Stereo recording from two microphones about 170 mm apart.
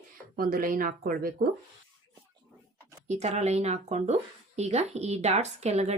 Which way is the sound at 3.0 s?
40° right (ahead or behind).